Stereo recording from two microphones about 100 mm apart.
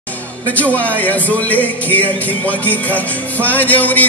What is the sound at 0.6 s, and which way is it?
Music, 15° left (ahead or behind).